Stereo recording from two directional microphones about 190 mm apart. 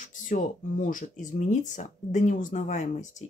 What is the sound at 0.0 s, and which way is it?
Speech, 45° left (ahead or behind).